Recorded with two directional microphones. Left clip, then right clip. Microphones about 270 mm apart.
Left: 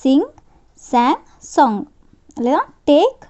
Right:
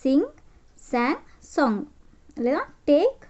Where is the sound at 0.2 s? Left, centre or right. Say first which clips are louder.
Left 5 dB; left.